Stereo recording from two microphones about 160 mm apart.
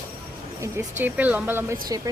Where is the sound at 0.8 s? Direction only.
10° right (ahead or behind).